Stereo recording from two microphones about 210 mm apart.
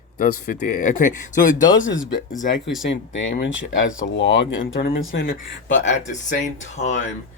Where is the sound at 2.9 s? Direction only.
60° left (ahead or behind).